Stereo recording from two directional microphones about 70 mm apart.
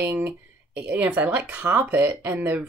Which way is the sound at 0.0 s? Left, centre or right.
Right.